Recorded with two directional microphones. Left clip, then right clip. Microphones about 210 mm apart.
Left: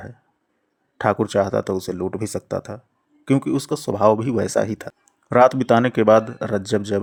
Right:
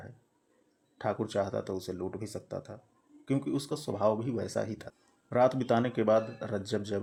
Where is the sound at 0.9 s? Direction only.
40° left (ahead or behind).